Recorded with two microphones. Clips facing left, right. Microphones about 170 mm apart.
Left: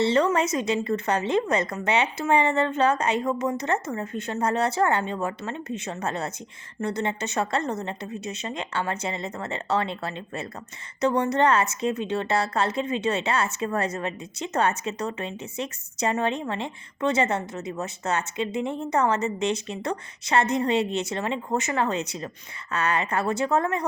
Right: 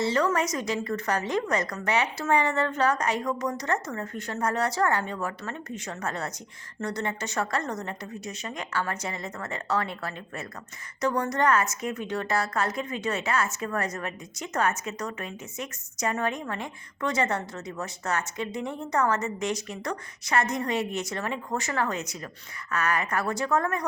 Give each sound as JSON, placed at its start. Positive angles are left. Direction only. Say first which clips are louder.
{"t": 0.0, "sound": "a woman's voice", "louder": "left 4 dB", "side_deg": 25}